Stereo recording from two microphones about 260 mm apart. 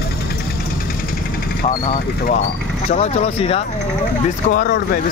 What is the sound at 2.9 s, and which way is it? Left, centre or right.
Speech, left.